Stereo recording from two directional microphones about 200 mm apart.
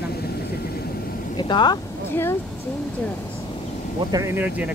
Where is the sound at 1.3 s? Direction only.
25° left (ahead or behind).